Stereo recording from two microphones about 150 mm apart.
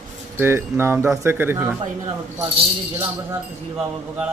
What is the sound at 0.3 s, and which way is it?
Speech, 15° right (ahead or behind).